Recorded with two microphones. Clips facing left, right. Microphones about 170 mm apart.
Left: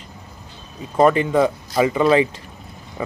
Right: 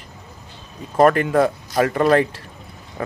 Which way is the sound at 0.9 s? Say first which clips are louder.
Even; centre (ahead or behind).